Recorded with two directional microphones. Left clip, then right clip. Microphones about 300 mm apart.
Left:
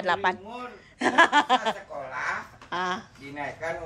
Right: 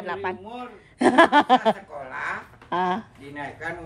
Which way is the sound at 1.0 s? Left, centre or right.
Centre.